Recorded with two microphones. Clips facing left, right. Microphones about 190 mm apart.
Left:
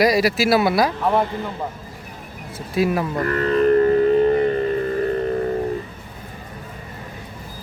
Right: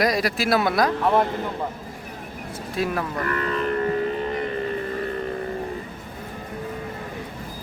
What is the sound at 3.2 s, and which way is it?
Music, 40° left (ahead or behind).